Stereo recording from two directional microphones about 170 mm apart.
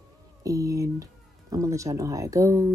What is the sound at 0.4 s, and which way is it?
Speech, 20° right (ahead or behind).